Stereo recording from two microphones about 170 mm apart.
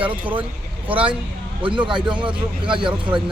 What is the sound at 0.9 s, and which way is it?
Speech, 30° right (ahead or behind).